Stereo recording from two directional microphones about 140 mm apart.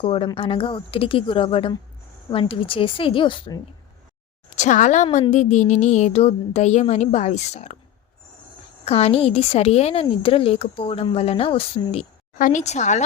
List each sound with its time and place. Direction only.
0.0 s a woman's voice: 40° left (ahead or behind)
4.5 s a woman's voice: 60° left (ahead or behind)
8.8 s a woman's voice: 45° left (ahead or behind)
12.4 s speech: 65° left (ahead or behind)